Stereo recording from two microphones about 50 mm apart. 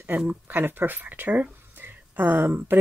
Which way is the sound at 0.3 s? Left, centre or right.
Right.